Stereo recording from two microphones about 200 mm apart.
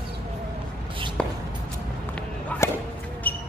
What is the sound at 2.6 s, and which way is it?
Basketball bounce, 15° left (ahead or behind).